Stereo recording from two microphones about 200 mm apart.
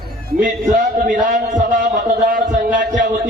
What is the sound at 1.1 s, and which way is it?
A man's voice, 40° right (ahead or behind).